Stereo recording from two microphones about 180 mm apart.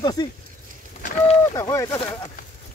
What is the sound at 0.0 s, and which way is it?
Speech, 25° left (ahead or behind).